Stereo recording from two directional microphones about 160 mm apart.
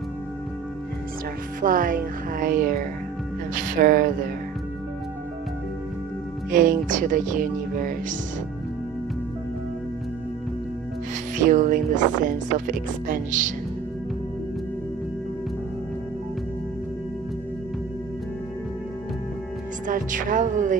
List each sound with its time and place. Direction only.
1.6 s speech: 60° right (ahead or behind)
6.5 s speech: 60° right (ahead or behind)
11.4 s speech: 55° right (ahead or behind)
19.9 s speech: 55° right (ahead or behind)